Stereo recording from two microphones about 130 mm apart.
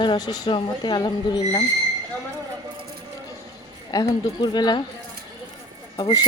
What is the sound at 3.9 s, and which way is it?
Speech, 30° left (ahead or behind).